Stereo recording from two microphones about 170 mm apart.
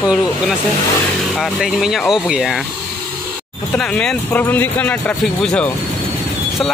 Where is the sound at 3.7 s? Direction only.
5° left (ahead or behind).